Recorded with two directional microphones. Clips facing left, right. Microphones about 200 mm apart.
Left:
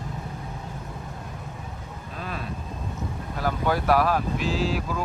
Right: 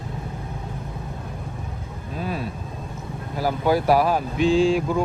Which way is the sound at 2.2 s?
5° right (ahead or behind).